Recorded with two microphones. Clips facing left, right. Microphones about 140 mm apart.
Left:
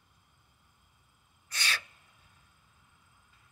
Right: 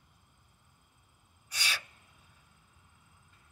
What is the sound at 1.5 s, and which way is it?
Gasp, 10° right (ahead or behind).